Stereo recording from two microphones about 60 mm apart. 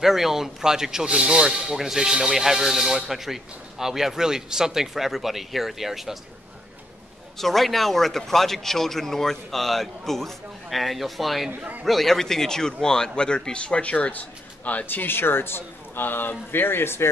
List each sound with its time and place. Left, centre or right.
0.0 s speech: centre
7.3 s a man's voice: centre; by 17.1 s left